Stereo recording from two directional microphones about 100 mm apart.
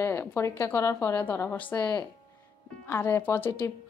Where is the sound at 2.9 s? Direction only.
25° left (ahead or behind).